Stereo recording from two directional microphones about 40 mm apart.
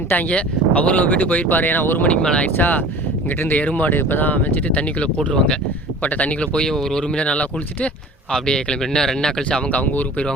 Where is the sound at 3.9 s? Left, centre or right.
Left.